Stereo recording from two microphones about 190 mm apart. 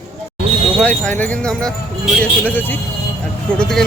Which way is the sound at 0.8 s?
5° left (ahead or behind).